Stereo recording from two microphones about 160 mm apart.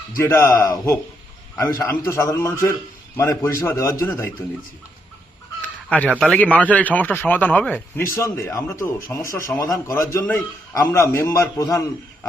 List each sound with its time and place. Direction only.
0.2 s a man's voice: 20° left (ahead or behind)
5.9 s a man's voice: 10° left (ahead or behind)